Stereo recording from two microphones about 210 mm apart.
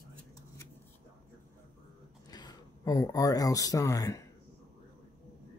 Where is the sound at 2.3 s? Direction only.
20° left (ahead or behind).